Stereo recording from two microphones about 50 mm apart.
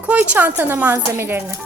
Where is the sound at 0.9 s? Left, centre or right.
Right.